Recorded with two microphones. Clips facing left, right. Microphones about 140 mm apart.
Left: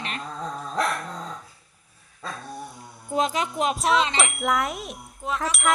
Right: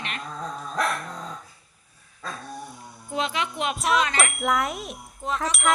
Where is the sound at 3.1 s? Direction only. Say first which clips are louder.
Left 3 dB; 40° left (ahead or behind).